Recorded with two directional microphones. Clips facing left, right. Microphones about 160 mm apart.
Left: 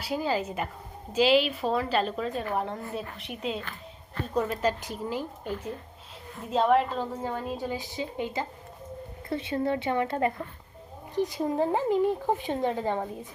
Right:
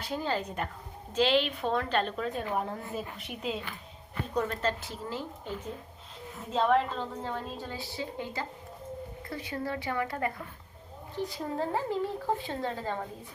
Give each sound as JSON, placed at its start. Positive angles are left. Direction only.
{"t": 0.0, "sound": "a woman's voice", "side_deg": 10}
{"t": 3.6, "sound": "music", "side_deg": -10}
{"t": 4.4, "sound": "a woman's voice", "side_deg": 10}